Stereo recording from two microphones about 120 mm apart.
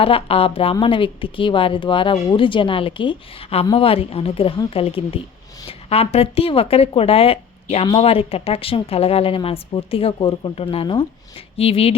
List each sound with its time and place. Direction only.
0.0 s a woman's voice: 50° left (ahead or behind)